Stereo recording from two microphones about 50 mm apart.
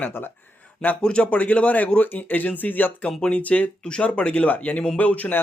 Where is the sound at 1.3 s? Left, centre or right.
Left.